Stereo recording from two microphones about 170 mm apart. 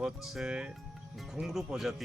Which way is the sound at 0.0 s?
Centre (ahead or behind).